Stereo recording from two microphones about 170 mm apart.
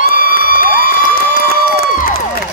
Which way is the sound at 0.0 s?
55° left (ahead or behind).